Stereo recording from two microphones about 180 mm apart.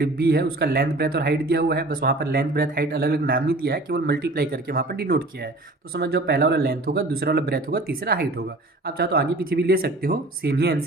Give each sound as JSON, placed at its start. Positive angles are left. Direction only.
{"t": 0.0, "sound": "speech", "side_deg": -60}